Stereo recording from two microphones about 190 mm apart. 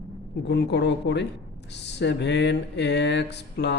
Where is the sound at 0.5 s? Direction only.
65° left (ahead or behind).